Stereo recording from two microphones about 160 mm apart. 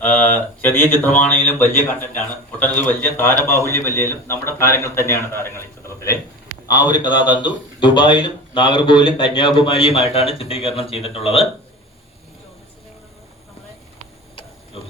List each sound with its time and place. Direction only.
0.0 s a man's voice: 10° left (ahead or behind); by 11.4 s 35° left (ahead or behind)